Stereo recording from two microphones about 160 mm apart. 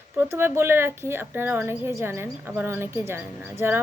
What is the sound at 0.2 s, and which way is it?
A woman's voice, 15° right (ahead or behind).